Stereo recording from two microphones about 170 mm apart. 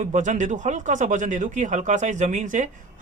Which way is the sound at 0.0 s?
45° right (ahead or behind).